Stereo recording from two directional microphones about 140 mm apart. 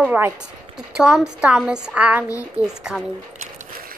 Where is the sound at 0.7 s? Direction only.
5° right (ahead or behind).